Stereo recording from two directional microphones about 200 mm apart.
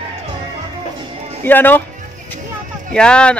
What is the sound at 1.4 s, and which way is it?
Speech, 10° left (ahead or behind).